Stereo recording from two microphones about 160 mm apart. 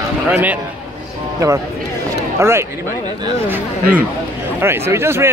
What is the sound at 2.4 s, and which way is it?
A man's voice, 15° right (ahead or behind).